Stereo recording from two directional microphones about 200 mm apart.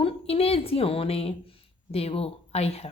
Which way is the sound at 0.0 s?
30° left (ahead or behind).